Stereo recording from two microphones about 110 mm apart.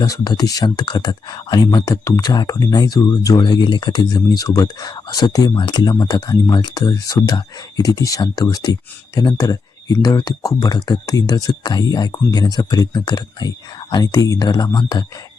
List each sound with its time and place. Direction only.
0.0 s speech: 35° left (ahead or behind)